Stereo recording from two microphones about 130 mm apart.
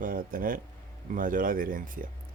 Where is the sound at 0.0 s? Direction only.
90° right.